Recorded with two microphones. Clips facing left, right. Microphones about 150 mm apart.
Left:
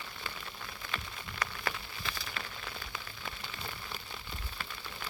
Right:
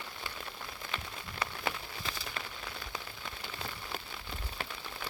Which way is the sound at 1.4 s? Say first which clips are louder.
Right 1 dB; 30° right (ahead or behind).